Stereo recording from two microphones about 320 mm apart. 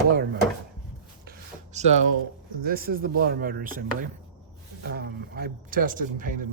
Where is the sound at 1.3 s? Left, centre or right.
Right.